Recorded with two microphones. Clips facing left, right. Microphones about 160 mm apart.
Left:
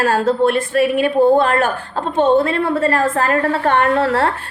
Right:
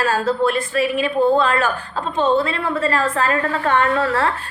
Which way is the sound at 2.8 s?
50° left (ahead or behind).